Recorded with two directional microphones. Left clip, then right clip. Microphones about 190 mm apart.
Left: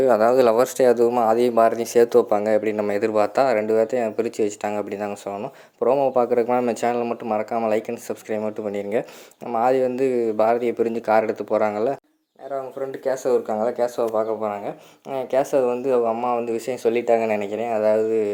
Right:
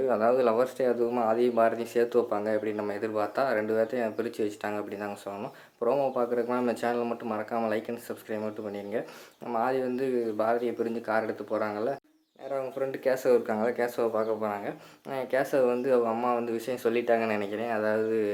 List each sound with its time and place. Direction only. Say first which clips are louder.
0.0 s speech: left 8 dB; 35° left (ahead or behind)
8.7 s speech: left 9 dB; 40° left (ahead or behind)
13.1 s speech: left 4 dB; 10° left (ahead or behind)